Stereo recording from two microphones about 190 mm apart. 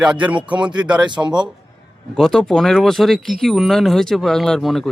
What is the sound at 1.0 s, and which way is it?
Speech, 25° right (ahead or behind).